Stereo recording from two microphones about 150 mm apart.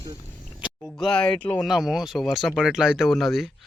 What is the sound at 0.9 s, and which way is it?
Speech, 5° left (ahead or behind).